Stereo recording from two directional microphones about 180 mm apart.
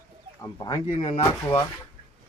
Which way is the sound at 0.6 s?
25° left (ahead or behind).